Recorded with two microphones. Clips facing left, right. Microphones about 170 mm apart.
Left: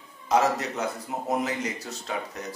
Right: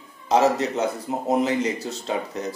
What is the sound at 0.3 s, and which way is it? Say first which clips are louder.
Speech: right 4 dB; 25° right (ahead or behind).